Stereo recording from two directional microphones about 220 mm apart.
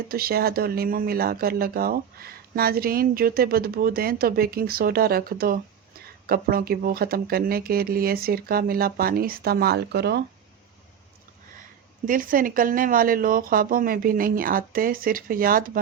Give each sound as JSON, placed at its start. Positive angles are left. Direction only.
{"t": 0.1, "sound": "speech", "side_deg": -45}
{"t": 12.0, "sound": "speech", "side_deg": -40}